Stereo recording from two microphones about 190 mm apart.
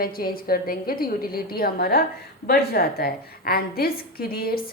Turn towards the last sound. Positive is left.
turn(degrees=50)  # may be behind; listen again after turning